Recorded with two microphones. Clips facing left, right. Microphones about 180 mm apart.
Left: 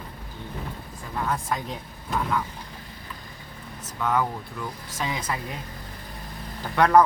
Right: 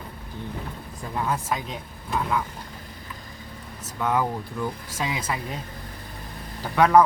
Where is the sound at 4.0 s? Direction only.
15° right (ahead or behind).